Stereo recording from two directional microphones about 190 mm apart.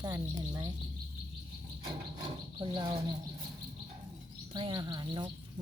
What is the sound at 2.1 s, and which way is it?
Cricket, 25° right (ahead or behind).